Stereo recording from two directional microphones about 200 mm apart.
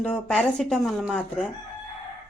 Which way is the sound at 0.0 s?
5° left (ahead or behind).